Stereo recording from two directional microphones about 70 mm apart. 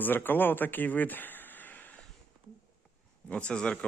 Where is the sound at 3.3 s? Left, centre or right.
Centre.